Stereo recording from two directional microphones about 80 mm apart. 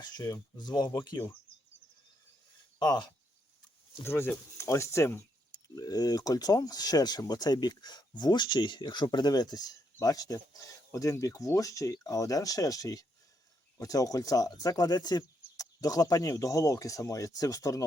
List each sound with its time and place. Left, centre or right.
0.0 s speech: left
2.7 s speech: left
4.0 s speech: left